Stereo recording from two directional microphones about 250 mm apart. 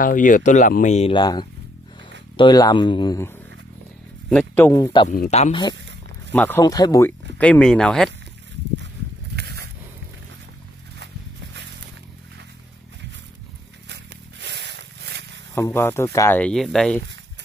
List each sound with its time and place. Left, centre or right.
0.0 s speech: left; by 5.0 s centre
5.0 s speech: left
6.3 s speech: centre
9.3 s dog: right
14.4 s a sound: right
15.5 s speech: centre